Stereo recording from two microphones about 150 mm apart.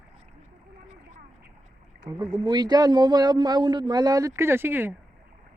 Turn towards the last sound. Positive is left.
turn(degrees=-15)  # may be behind; listen again after turning